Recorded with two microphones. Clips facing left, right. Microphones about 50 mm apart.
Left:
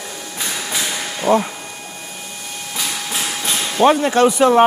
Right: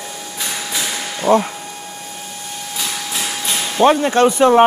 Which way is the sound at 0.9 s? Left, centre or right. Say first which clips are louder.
Even; centre.